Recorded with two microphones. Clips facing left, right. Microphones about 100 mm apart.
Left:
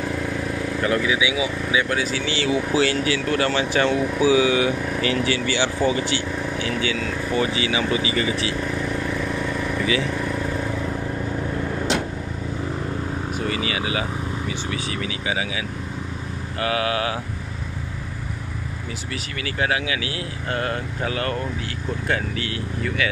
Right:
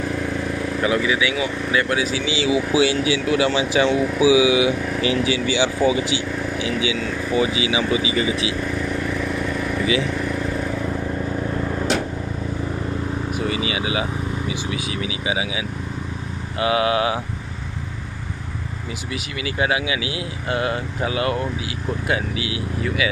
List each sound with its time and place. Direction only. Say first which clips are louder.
0.8 s speech: right 1 dB; centre (ahead or behind)
13.5 s vehicle: even; 20° right (ahead or behind)
16.5 s speech: right 4 dB; 20° right (ahead or behind)
19.4 s speech: right 2 dB; 15° right (ahead or behind)